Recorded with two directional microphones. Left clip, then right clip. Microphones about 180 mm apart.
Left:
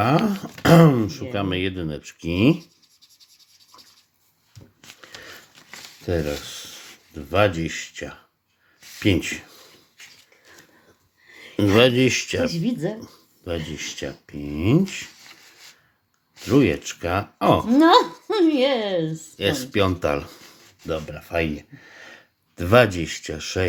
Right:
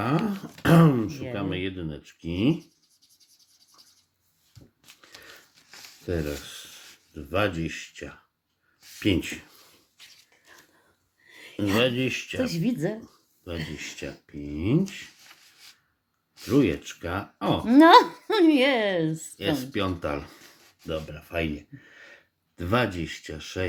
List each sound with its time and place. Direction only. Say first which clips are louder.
0.6 s speech: left 6 dB; 20° left (ahead or behind)
6.1 s speech: left 6 dB; 25° left (ahead or behind)
11.5 s speech: left 8 dB; 30° left (ahead or behind)
12.5 s speech: left 2 dB; 25° right (ahead or behind)
13.1 s a sound: left 8 dB; 30° left (ahead or behind)
13.7 s speech: left 6 dB; 25° left (ahead or behind)
16.5 s speech: left 4 dB; 25° left (ahead or behind)
17.7 s speech: right 3 dB; 30° right (ahead or behind)
19.4 s speech: left 7 dB; 30° left (ahead or behind)